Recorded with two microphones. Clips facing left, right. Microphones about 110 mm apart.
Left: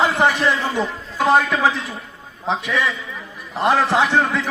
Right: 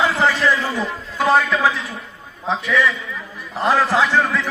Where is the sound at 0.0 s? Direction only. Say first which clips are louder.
Even; 20° left (ahead or behind).